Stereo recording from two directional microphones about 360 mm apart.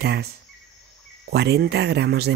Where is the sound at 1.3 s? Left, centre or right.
Right.